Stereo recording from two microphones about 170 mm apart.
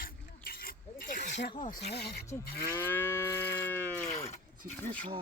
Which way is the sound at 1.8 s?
70° left (ahead or behind).